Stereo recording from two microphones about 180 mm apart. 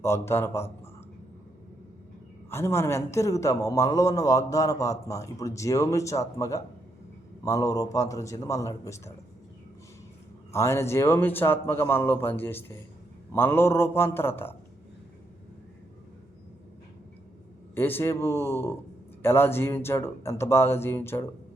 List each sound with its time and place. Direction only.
0.0 s a man's voice: 15° left (ahead or behind)
2.5 s a man's voice: 15° left (ahead or behind)
10.5 s a man's voice: 15° left (ahead or behind)
17.7 s a man's voice: 10° left (ahead or behind)